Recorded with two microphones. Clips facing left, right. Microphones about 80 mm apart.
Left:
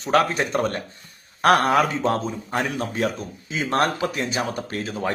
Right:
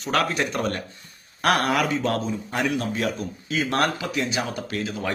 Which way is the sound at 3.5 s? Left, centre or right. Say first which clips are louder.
Left 1 dB; left.